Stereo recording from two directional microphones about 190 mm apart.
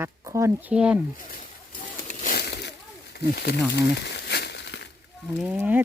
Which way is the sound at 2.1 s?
40° left (ahead or behind).